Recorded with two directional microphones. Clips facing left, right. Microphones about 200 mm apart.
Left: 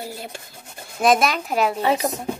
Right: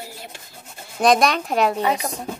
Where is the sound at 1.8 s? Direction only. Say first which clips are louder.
Left 2 dB; 30° left (ahead or behind).